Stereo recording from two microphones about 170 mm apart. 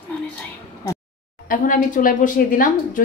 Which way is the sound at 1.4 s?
50° left (ahead or behind).